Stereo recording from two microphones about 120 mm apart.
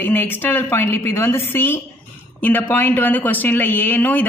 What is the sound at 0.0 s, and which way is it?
A woman's voice, 15° left (ahead or behind).